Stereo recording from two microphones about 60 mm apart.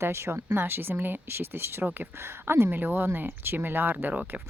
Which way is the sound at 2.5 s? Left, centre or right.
Right.